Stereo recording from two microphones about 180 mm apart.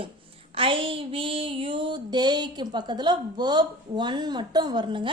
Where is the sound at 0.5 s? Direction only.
30° right (ahead or behind).